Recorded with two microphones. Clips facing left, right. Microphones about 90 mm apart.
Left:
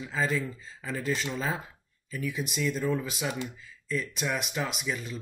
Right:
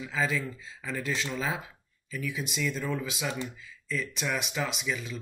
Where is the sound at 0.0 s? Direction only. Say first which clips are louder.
Left 1 dB; centre (ahead or behind).